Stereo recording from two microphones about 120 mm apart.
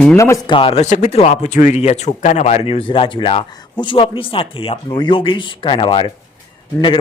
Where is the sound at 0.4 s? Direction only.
45° left (ahead or behind).